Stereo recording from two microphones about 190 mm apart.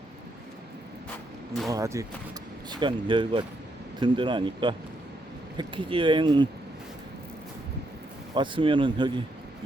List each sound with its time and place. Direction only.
1.6 s speech: 15° right (ahead or behind)
8.4 s speech: 25° right (ahead or behind)